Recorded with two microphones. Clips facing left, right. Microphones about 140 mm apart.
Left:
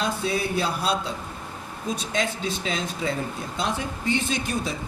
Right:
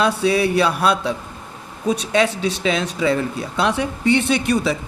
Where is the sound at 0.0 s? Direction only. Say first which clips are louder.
Right 9 dB; 75° right (ahead or behind).